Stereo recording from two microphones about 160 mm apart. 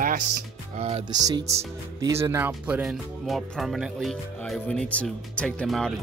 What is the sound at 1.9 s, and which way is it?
Speech, 20° right (ahead or behind).